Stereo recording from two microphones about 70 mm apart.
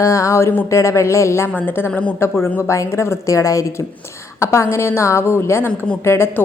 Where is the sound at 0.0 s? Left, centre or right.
Left.